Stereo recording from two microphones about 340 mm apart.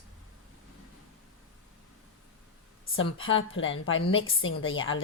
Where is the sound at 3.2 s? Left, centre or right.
Left.